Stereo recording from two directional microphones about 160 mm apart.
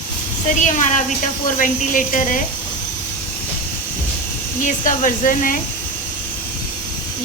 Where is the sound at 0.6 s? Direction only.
50° left (ahead or behind).